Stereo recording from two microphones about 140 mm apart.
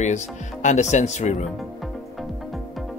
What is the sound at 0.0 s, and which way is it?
Speech, 60° left (ahead or behind).